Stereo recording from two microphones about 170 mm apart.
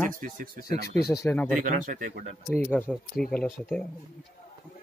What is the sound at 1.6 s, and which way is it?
Speech, 55° right (ahead or behind).